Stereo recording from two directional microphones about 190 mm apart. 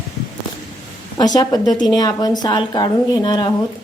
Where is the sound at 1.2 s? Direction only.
20° left (ahead or behind).